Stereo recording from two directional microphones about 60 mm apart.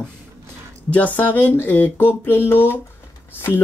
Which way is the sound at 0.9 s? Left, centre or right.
Left.